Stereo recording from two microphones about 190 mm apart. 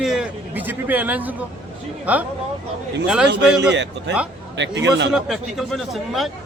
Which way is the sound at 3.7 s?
70° right (ahead or behind).